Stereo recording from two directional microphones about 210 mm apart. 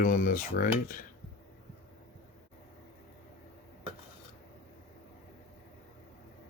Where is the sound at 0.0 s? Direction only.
40° left (ahead or behind).